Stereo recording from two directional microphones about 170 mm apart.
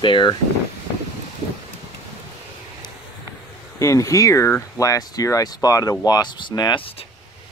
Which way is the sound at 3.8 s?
20° left (ahead or behind).